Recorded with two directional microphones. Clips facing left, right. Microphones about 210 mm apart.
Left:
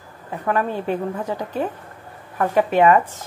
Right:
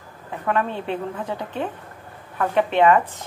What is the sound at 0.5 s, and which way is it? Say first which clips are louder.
Speech: left 2 dB; 5° left (ahead or behind).